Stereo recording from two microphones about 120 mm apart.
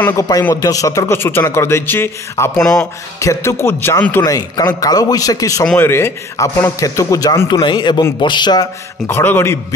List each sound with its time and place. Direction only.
0.1 s a man's voice: 30° left (ahead or behind)
2.6 s speech: 5° left (ahead or behind)
3.2 s speech: 25° left (ahead or behind)
4.2 s a man's voice: 30° left (ahead or behind)
7.6 s a man's voice: 40° left (ahead or behind)
9.0 s speech: 20° left (ahead or behind)